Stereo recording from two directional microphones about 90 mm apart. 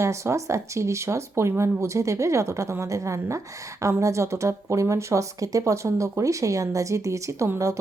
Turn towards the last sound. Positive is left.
turn(degrees=-35)  # may be behind; listen again after turning